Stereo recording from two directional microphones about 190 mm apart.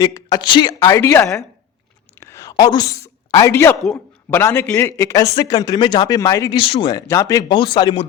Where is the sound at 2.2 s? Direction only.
15° left (ahead or behind).